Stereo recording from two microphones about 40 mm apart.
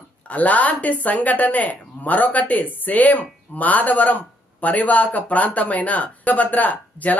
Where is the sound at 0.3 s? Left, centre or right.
Left.